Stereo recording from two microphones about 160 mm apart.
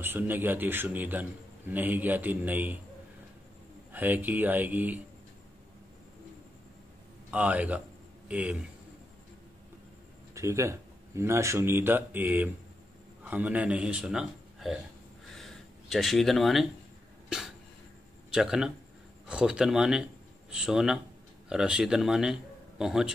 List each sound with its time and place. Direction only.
0.0 s speech: 10° right (ahead or behind)
3.9 s speech: 10° right (ahead or behind)
7.2 s speech: 10° right (ahead or behind)
10.3 s speech: 20° right (ahead or behind)
15.3 s a sound: centre (ahead or behind)
17.3 s cough: 5° right (ahead or behind)
18.3 s a man's voice: 5° right (ahead or behind)